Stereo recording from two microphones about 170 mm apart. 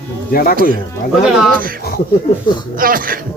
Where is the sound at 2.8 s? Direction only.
55° right (ahead or behind).